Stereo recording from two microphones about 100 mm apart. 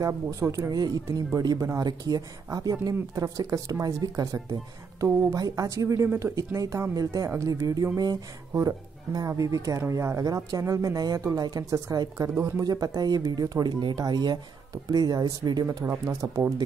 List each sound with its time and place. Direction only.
0.0 s speech: 30° right (ahead or behind)
7.5 s speech: 40° right (ahead or behind)
12.6 s speech: 40° right (ahead or behind)
15.8 s speech: 30° right (ahead or behind)